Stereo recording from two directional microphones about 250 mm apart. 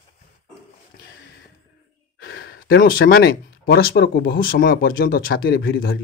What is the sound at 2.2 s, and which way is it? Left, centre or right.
Speech, left.